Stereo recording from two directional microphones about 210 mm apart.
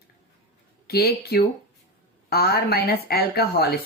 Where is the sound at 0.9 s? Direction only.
50° left (ahead or behind).